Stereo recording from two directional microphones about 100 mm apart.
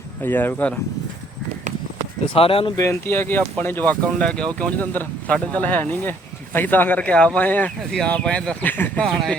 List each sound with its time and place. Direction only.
0.2 s speech: 20° left (ahead or behind)
2.3 s speech: 65° left (ahead or behind)
2.7 s speech: 25° left (ahead or behind)
9.0 s speech: centre (ahead or behind)